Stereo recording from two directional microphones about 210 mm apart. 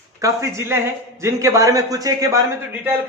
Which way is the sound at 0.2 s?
15° right (ahead or behind).